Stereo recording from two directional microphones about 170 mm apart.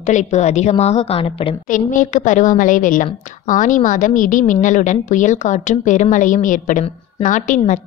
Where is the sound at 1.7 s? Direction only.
50° left (ahead or behind).